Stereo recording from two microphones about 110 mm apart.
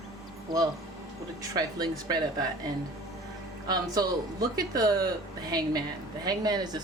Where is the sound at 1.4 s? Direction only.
35° right (ahead or behind).